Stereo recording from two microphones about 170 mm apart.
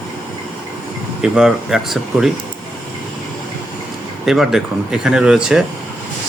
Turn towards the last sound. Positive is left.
turn(degrees=-5)  # may be behind; listen again after turning